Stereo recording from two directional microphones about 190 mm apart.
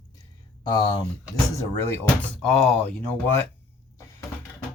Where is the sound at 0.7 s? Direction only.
20° left (ahead or behind); by 3.3 s 5° left (ahead or behind).